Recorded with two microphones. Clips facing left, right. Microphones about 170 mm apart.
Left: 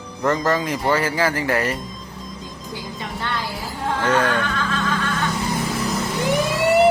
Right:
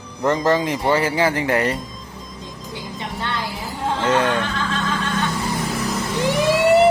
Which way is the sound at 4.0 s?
20° right (ahead or behind).